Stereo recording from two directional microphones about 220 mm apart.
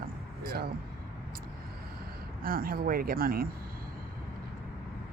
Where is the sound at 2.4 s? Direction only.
40° right (ahead or behind).